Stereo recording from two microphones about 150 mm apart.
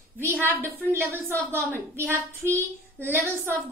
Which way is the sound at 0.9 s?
15° right (ahead or behind).